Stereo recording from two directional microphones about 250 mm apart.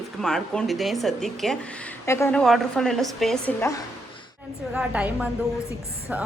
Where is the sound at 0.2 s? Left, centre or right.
Centre.